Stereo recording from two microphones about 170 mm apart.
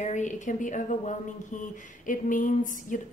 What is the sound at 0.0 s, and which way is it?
A woman's voice, 45° left (ahead or behind).